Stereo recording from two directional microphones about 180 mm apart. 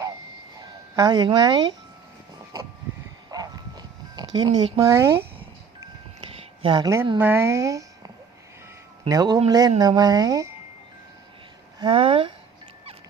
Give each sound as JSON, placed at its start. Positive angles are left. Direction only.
{"t": 0.9, "sound": "speech", "side_deg": -20}
{"t": 3.3, "sound": "dog", "side_deg": -20}
{"t": 6.6, "sound": "speech", "side_deg": -25}
{"t": 11.8, "sound": "speech", "side_deg": -30}